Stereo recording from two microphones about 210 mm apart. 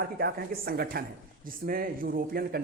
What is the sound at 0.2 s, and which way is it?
Speech, 45° right (ahead or behind).